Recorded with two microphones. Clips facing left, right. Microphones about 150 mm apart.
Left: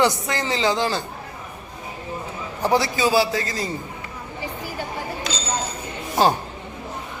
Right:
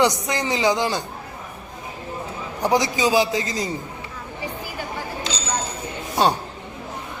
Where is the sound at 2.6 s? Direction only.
15° right (ahead or behind).